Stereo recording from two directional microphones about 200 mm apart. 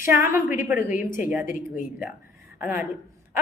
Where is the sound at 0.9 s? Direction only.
40° left (ahead or behind).